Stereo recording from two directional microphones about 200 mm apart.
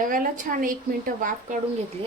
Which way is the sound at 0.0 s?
45° right (ahead or behind).